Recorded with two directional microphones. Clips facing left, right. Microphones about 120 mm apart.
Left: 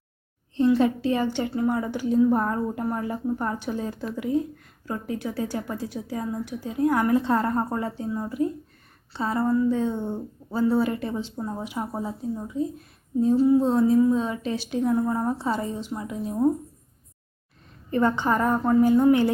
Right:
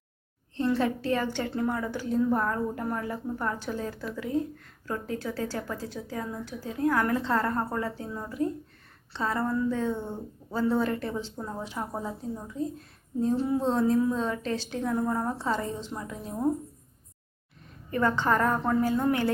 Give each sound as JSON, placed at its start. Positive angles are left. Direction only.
{"t": 0.5, "sound": "a woman's voice", "side_deg": 15}
{"t": 13.2, "sound": "a woman's voice", "side_deg": 5}
{"t": 17.9, "sound": "a woman's voice", "side_deg": 20}